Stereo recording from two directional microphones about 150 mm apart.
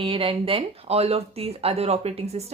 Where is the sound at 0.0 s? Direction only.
35° right (ahead or behind).